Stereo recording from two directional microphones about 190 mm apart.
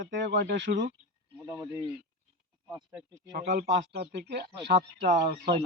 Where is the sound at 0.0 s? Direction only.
70° right (ahead or behind).